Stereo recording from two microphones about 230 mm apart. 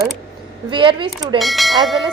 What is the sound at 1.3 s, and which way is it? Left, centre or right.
Speech, centre.